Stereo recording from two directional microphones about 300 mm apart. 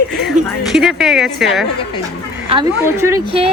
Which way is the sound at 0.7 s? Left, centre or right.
Centre.